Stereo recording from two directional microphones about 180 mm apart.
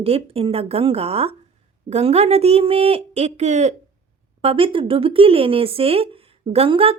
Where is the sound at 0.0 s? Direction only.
35° right (ahead or behind).